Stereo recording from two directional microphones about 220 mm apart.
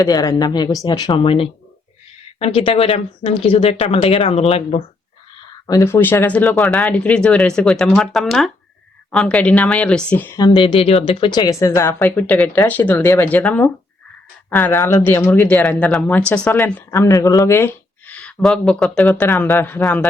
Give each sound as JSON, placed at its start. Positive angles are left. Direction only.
{"t": 0.0, "sound": "speech", "side_deg": 15}
{"t": 5.6, "sound": "speech", "side_deg": 15}